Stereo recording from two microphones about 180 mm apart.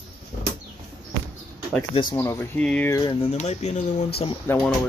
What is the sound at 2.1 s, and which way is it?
Speech, 10° left (ahead or behind).